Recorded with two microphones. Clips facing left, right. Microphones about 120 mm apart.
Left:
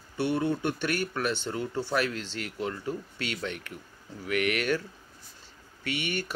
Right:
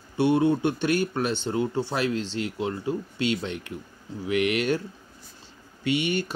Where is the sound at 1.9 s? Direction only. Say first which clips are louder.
Right 3 dB; 30° right (ahead or behind).